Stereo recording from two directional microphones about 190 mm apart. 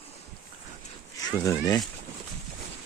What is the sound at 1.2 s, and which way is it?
Speech, 20° left (ahead or behind).